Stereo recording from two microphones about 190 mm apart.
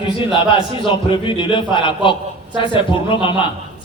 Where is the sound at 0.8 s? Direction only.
25° left (ahead or behind).